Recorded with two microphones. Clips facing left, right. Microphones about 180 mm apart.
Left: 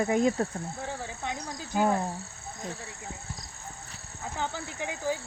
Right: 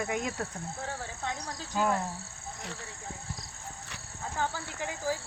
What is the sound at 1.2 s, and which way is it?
Cricket, 15° left (ahead or behind).